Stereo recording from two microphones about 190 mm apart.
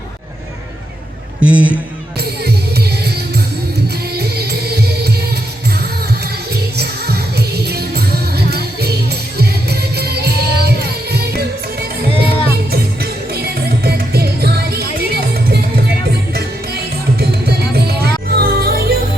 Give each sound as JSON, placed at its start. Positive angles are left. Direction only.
{"t": 1.4, "sound": "a man's voice", "side_deg": -5}
{"t": 2.1, "sound": "music", "side_deg": -60}
{"t": 6.5, "sound": "music", "side_deg": -60}